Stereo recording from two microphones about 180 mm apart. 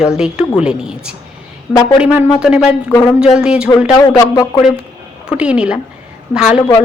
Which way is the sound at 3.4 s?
5° right (ahead or behind).